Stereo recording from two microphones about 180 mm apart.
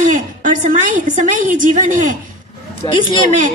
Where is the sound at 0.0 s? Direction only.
45° right (ahead or behind).